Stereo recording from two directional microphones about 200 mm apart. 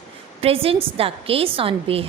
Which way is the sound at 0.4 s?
30° right (ahead or behind).